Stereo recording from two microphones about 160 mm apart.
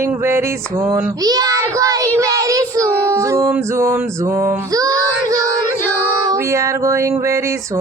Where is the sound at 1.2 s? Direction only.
25° right (ahead or behind).